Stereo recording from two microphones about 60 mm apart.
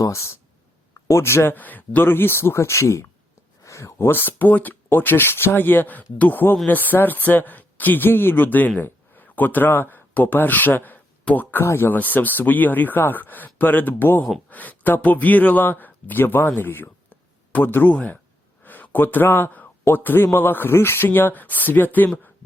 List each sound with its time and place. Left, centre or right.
0.0 s speech: left
1.5 s a man's voice: left
11.6 s a man's voice: left
11.9 s a man's voice: left
16.6 s a sound: left
17.9 s a man's voice: left